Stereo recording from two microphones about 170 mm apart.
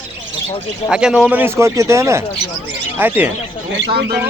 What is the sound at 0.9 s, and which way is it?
Speech, 5° right (ahead or behind).